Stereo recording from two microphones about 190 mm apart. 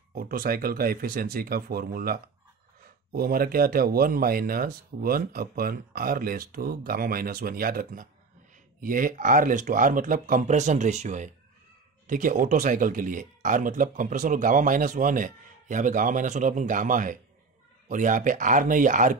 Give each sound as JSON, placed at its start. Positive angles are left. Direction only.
{"t": 0.1, "sound": "speech", "side_deg": -50}